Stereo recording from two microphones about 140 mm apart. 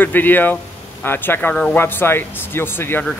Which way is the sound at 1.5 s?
5° left (ahead or behind).